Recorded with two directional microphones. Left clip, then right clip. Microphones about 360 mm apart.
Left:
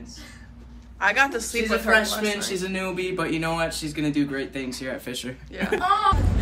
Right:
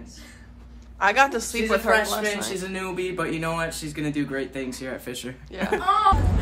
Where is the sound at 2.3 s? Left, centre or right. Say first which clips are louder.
Left 1 dB; centre.